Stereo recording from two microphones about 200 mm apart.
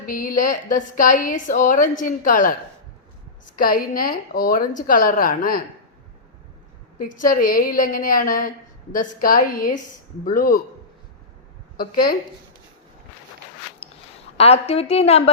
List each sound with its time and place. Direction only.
0.0 s a woman's voice: 45° left (ahead or behind)
3.6 s a woman's voice: 45° left (ahead or behind)
7.0 s a woman's voice: 45° left (ahead or behind)
11.8 s a woman's voice: 45° left (ahead or behind)
13.8 s a sound: 30° left (ahead or behind)
14.3 s a woman's voice: 30° left (ahead or behind)